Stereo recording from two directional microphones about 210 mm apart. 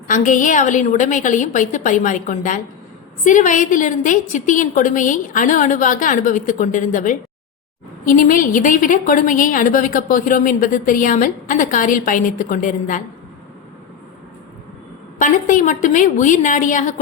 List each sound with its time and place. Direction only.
0.1 s a woman's voice: 40° left (ahead or behind)
15.2 s a woman's voice: 35° left (ahead or behind)